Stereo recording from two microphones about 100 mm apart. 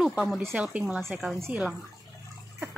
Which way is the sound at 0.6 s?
10° right (ahead or behind).